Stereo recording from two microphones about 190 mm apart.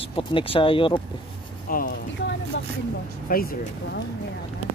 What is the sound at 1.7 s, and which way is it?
Speech, 50° left (ahead or behind).